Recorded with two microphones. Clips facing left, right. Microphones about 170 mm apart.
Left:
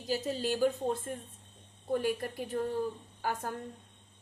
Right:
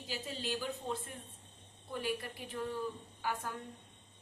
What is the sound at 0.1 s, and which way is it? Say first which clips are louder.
Speech: left 8 dB; 40° left (ahead or behind).